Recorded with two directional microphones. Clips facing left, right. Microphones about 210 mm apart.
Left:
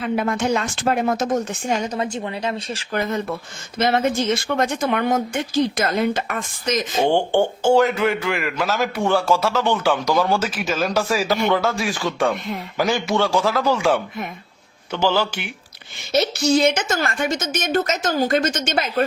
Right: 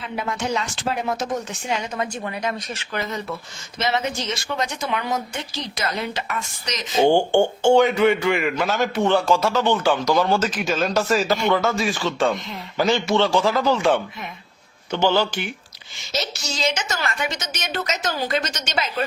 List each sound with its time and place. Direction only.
0.0 s speech: 55° left (ahead or behind)
1.9 s speech: 25° left (ahead or behind)
2.9 s speech: 50° left (ahead or behind)
6.9 s speech: centre (ahead or behind)
16.1 s speech: 55° left (ahead or behind)